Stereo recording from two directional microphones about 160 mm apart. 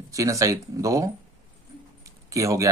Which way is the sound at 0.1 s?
20° right (ahead or behind).